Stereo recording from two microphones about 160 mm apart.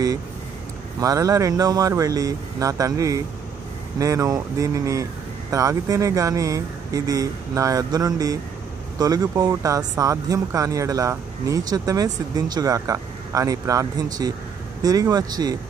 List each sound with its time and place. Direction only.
1.0 s speech: 20° right (ahead or behind)